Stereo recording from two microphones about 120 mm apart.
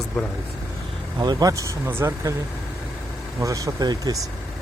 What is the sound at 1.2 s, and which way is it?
Speech, 35° right (ahead or behind).